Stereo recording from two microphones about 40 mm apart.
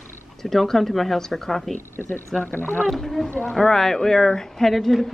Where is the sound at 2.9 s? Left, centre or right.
Centre.